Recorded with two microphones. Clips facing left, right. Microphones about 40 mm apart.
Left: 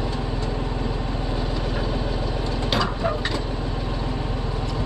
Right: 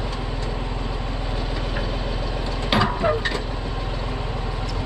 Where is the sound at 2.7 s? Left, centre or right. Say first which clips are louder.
Right 4 dB; centre.